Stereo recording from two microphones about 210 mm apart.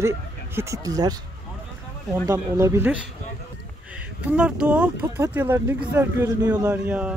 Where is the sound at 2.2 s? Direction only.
15° right (ahead or behind).